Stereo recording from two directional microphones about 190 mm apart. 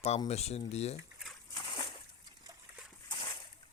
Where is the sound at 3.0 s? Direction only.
25° left (ahead or behind).